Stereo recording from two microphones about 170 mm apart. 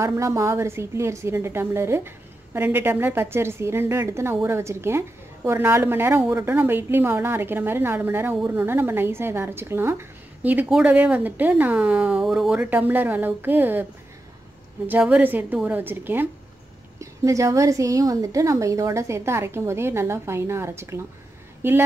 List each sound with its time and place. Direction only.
0.0 s a woman's voice: 15° right (ahead or behind)
14.9 s a woman's voice: 10° right (ahead or behind)